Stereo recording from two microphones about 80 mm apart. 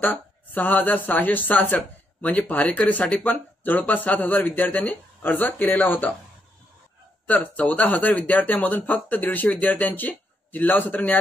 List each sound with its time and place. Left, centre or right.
0.0 s speech: left
7.2 s speech: centre